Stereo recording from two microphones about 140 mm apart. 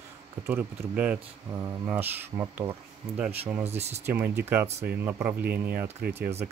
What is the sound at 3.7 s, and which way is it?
Speech, 50° right (ahead or behind).